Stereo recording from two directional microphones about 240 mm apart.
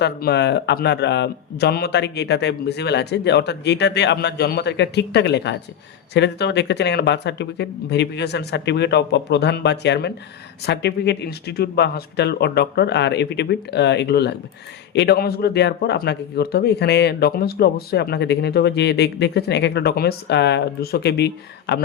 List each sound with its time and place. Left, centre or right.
0.0 s speech: left